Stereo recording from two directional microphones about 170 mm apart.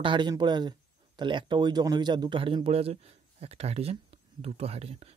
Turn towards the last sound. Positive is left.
turn(degrees=-35)  # may be behind; listen again after turning